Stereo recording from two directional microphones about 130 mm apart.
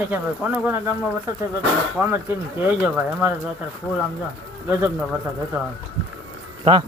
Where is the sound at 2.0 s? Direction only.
15° right (ahead or behind).